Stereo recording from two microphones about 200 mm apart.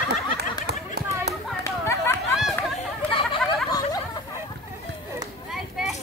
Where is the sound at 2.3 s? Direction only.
Centre (ahead or behind).